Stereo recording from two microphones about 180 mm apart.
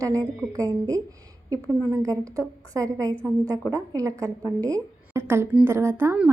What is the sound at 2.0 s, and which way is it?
A woman's voice, 20° right (ahead or behind).